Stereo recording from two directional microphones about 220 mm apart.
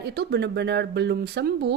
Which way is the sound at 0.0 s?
50° right (ahead or behind).